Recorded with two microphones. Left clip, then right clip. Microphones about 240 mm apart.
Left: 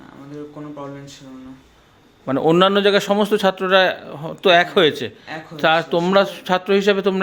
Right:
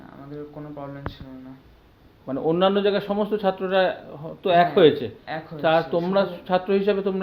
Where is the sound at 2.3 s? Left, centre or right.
Left.